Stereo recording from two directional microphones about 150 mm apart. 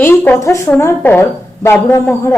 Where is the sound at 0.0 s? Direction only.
15° left (ahead or behind).